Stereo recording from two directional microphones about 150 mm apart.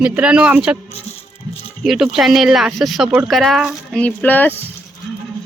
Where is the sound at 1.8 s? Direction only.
Centre (ahead or behind).